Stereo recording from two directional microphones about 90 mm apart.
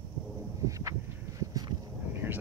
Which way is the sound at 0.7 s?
40° right (ahead or behind).